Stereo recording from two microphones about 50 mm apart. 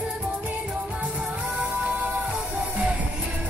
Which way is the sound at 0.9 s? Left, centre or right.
Right.